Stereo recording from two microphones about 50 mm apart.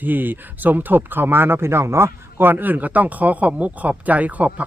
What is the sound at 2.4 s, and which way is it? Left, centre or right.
Speech, right.